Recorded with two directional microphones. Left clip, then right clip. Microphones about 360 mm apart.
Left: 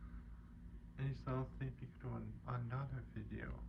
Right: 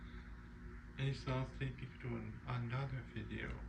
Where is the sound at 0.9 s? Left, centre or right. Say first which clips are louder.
Right 3 dB; centre.